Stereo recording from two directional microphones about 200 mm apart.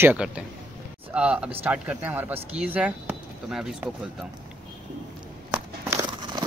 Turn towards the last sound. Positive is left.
turn(degrees=-20)  # may be behind; listen again after turning